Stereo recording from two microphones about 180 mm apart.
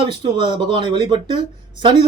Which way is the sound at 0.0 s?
30° right (ahead or behind).